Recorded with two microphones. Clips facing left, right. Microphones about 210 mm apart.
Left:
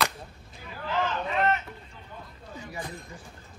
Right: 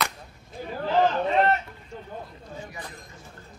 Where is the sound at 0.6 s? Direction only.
40° right (ahead or behind).